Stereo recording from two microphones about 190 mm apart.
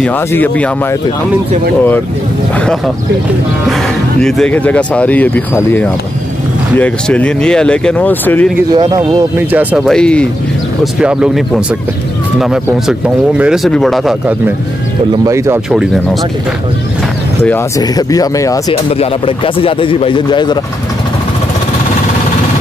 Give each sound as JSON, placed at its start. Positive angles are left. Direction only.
{"t": 0.0, "sound": "speech", "side_deg": 10}
{"t": 4.2, "sound": "speech", "side_deg": 5}
{"t": 8.7, "sound": "speech", "side_deg": -25}
{"t": 9.5, "sound": "speech", "side_deg": -10}
{"t": 9.8, "sound": "speech", "side_deg": 5}
{"t": 15.2, "sound": "speech", "side_deg": -15}
{"t": 17.5, "sound": "speech", "side_deg": 20}
{"t": 18.9, "sound": "speech", "side_deg": 30}